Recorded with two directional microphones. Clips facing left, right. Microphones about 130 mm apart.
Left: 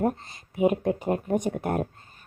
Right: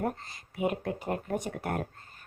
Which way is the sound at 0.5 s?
25° left (ahead or behind).